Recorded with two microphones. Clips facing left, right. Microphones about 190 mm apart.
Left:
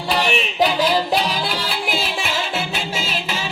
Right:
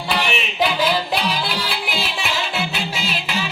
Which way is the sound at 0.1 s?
40° left (ahead or behind).